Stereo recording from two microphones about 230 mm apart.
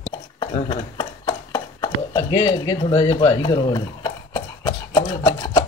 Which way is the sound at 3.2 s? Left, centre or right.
Centre.